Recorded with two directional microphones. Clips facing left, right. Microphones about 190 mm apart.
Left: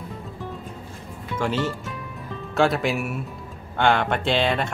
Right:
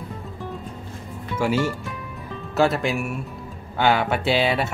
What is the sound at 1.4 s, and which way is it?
Speech, 10° right (ahead or behind).